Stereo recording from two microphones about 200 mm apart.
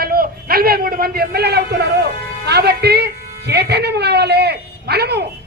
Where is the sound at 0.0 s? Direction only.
50° right (ahead or behind).